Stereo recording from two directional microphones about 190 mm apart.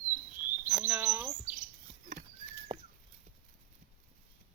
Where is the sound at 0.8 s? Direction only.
15° right (ahead or behind).